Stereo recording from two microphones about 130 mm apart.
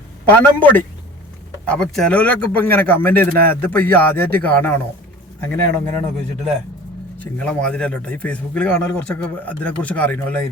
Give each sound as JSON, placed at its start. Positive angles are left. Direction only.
{"t": 0.3, "sound": "speech", "side_deg": 15}
{"t": 6.1, "sound": "a man's voice", "side_deg": 0}